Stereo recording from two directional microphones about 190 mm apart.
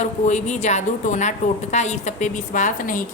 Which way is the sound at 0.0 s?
40° left (ahead or behind).